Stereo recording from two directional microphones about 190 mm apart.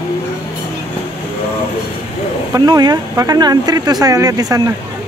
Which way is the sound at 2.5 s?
20° right (ahead or behind).